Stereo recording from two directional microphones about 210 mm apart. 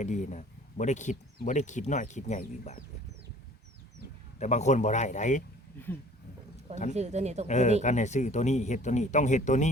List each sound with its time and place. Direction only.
0.0 s speech: 35° left (ahead or behind)
4.4 s speech: 35° left (ahead or behind)
6.9 s speech: 30° right (ahead or behind)
7.4 s speech: 35° left (ahead or behind)